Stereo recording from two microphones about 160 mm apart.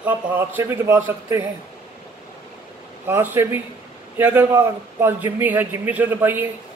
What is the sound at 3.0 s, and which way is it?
A man's voice, 15° right (ahead or behind).